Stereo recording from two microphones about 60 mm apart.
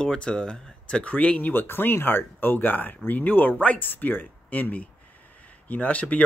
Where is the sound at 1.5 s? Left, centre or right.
Left.